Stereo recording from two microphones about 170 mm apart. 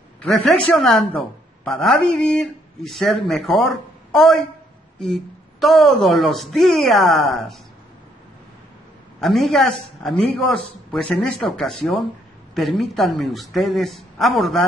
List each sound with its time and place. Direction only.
0.2 s a woman's voice: 5° left (ahead or behind)
5.0 s a woman's voice: centre (ahead or behind)
9.2 s a woman's voice: centre (ahead or behind)